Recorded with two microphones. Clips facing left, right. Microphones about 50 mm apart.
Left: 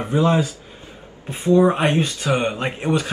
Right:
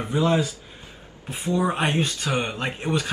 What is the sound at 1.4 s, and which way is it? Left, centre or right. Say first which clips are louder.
Speech: left 9 dB; left.